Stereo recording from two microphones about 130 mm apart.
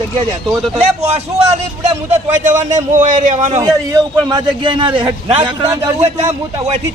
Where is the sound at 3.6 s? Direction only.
30° right (ahead or behind).